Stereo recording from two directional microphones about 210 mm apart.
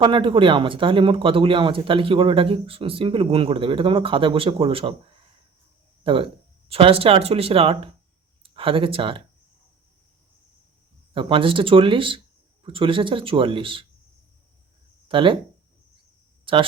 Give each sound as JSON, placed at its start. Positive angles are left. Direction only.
{"t": 0.0, "sound": "speech", "side_deg": -25}
{"t": 6.0, "sound": "speech", "side_deg": -25}
{"t": 11.1, "sound": "speech", "side_deg": -25}
{"t": 15.0, "sound": "speech", "side_deg": -25}
{"t": 16.5, "sound": "speech", "side_deg": -25}